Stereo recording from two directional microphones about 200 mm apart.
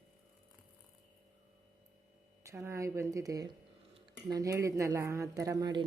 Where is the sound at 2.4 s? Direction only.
15° right (ahead or behind).